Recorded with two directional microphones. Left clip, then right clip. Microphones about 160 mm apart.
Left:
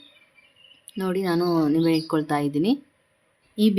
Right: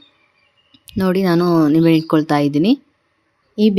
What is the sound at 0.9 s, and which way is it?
Speech, 45° right (ahead or behind).